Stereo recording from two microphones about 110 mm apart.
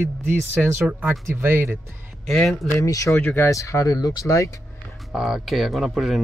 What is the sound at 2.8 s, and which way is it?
Speech, 30° left (ahead or behind).